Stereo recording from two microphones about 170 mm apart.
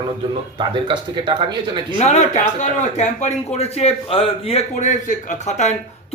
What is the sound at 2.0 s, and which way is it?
A man's voice, 40° left (ahead or behind).